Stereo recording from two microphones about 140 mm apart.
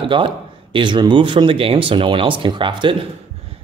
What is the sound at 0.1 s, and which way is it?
Speech, 40° right (ahead or behind).